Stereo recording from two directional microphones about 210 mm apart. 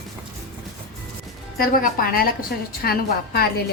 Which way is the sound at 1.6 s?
45° left (ahead or behind).